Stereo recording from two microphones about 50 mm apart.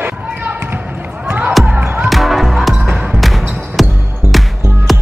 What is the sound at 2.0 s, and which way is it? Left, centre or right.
Music, centre.